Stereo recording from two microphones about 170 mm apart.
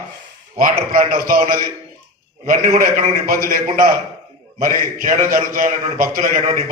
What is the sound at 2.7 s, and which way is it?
Speech, 50° right (ahead or behind).